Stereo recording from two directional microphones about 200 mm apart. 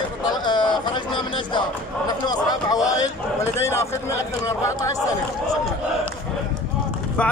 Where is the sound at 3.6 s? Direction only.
15° left (ahead or behind).